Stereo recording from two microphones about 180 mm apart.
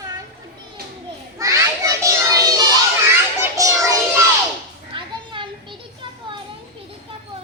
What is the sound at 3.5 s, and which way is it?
Music, 20° right (ahead or behind).